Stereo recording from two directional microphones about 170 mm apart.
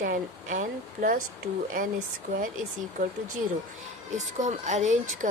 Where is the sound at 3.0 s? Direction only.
45° right (ahead or behind).